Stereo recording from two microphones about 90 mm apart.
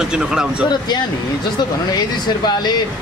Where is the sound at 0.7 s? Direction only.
50° left (ahead or behind).